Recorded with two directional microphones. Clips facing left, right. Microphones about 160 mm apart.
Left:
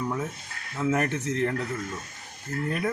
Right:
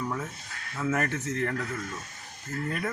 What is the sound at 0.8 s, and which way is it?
Speech, 20° left (ahead or behind).